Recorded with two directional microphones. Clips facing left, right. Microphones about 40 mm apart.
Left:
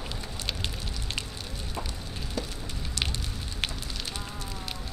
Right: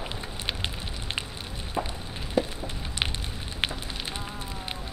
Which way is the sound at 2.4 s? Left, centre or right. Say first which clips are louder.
Right 9 dB; right.